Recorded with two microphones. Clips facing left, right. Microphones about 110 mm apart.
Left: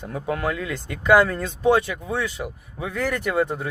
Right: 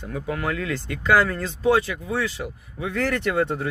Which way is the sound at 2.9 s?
10° left (ahead or behind).